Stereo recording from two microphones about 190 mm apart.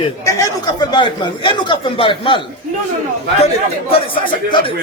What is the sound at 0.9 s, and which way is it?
Speech, 25° left (ahead or behind).